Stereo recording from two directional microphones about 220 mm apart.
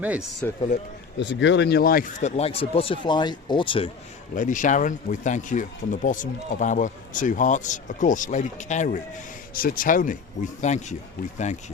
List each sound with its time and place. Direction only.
0.0 s speech: 5° right (ahead or behind)
1.2 s speech: 55° left (ahead or behind); by 3.9 s 25° left (ahead or behind)
4.4 s speech: 35° left (ahead or behind)